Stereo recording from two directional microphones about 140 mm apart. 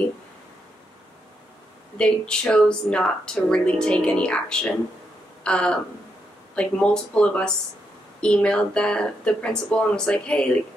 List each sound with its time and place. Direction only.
2.0 s speech: 5° left (ahead or behind)